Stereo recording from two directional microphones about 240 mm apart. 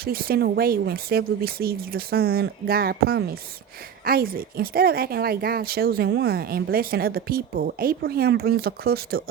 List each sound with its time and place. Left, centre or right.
0.0 s speech: right